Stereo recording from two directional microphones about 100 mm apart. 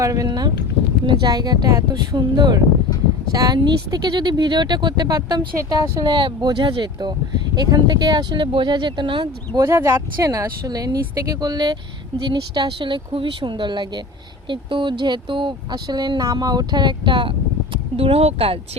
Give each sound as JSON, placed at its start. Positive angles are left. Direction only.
{"t": 0.0, "sound": "speech", "side_deg": -30}
{"t": 0.3, "sound": "speech", "side_deg": -45}
{"t": 9.6, "sound": "speech", "side_deg": -30}
{"t": 17.9, "sound": "speech", "side_deg": -80}